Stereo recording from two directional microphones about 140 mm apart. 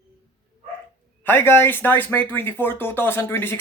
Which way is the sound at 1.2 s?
15° left (ahead or behind).